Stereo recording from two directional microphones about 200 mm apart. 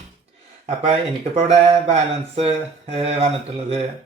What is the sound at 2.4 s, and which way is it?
Speech, 30° right (ahead or behind).